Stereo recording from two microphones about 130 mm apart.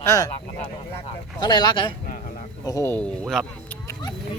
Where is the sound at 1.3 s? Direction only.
35° left (ahead or behind).